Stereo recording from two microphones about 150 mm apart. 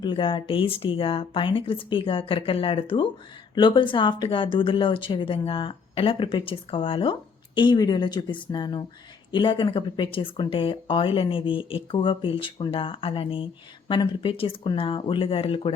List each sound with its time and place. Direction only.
0.0 s speech: 35° left (ahead or behind)